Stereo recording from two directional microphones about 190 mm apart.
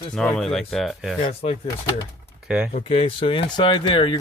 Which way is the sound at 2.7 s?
45° left (ahead or behind).